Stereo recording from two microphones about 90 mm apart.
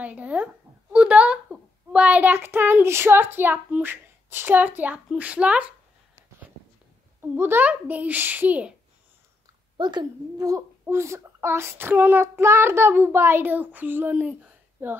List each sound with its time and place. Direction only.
0.0 s a child's voice: 15° right (ahead or behind)
7.2 s a child's voice: 25° right (ahead or behind)
9.8 s a woman's voice: 55° right (ahead or behind)
10.9 s a child's voice: 30° right (ahead or behind)